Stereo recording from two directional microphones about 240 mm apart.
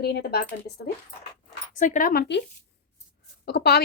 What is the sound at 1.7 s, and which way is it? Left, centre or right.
Speech, left.